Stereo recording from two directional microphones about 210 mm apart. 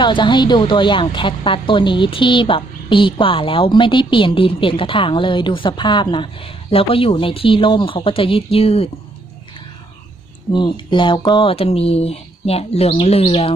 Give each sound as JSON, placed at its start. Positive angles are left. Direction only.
{"t": 0.0, "sound": "a woman's voice", "side_deg": 20}
{"t": 10.5, "sound": "a woman's voice", "side_deg": 20}